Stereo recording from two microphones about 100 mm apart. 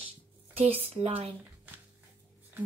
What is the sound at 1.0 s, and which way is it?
Speech, 75° right (ahead or behind).